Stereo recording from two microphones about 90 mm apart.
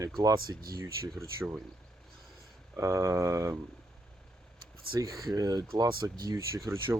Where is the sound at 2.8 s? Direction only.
30° right (ahead or behind).